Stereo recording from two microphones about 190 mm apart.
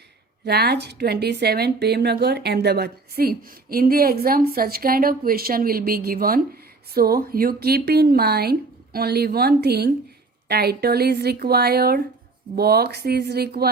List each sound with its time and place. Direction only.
0.4 s a woman's voice: 60° right (ahead or behind)